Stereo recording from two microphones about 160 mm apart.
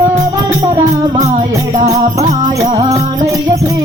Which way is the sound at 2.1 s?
20° right (ahead or behind).